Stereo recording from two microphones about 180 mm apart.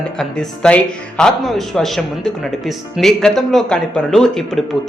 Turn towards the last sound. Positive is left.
turn(degrees=0)  # may be behind; listen again after turning